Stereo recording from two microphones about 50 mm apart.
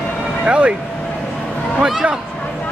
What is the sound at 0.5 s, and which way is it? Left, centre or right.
Speech, right.